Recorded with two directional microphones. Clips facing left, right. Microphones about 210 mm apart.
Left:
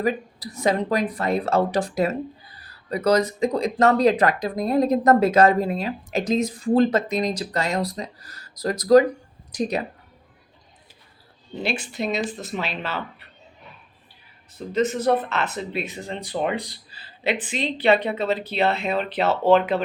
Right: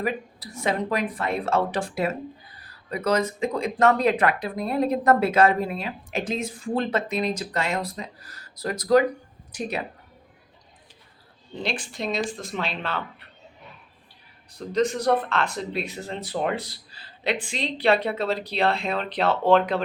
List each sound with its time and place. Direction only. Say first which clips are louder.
0.0 s speech: left 4 dB; 40° left (ahead or behind)
11.5 s speech: left 3 dB; 5° left (ahead or behind)
14.5 s speech: left 1 dB; 5° left (ahead or behind)